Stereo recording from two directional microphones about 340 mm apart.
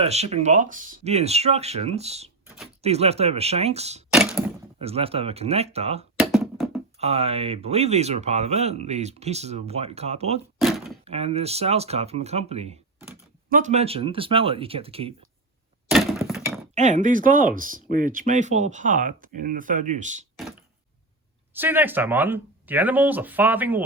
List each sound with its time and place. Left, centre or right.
0.0 s speech: centre
4.1 s a sound: centre
4.8 s speech: centre
6.1 s a sound: centre
7.0 s speech: centre
10.6 s a sound: centre
11.0 s speech: centre
15.9 s crack: centre
16.7 s speech: right
21.5 s speech: centre